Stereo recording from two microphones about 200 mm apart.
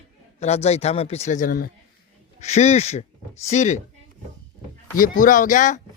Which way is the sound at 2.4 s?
35° left (ahead or behind).